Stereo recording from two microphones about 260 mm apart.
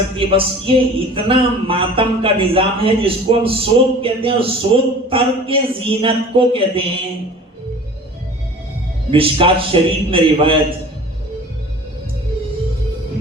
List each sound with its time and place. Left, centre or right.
0.2 s speech: right
9.1 s speech: right